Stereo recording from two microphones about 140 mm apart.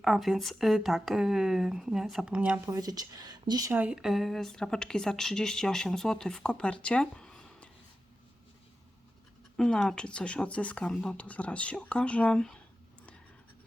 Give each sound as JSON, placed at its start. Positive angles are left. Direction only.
{"t": 0.0, "sound": "speech", "side_deg": 0}
{"t": 2.6, "sound": "speech", "side_deg": -25}
{"t": 3.7, "sound": "speech", "side_deg": -10}
{"t": 6.8, "sound": "a sound", "side_deg": 5}
{"t": 9.6, "sound": "speech", "side_deg": 5}